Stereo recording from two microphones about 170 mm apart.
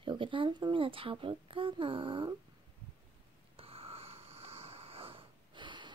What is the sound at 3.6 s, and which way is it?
Snoring, 35° right (ahead or behind).